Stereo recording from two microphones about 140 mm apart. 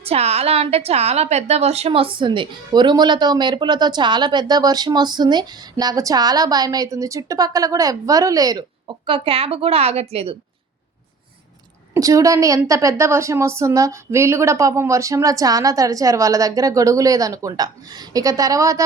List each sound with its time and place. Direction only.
0.0 s a woman's voice: 50° right (ahead or behind); by 8.6 s 25° right (ahead or behind)
9.0 s a woman's voice: 40° right (ahead or behind)
11.9 s a woman's voice: 25° right (ahead or behind)